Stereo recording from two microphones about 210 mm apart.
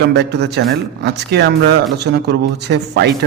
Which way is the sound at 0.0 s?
55° right (ahead or behind).